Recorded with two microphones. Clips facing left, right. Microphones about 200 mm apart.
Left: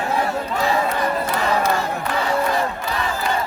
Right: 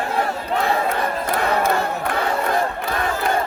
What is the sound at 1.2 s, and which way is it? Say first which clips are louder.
Crowd: even; 55° right (ahead or behind).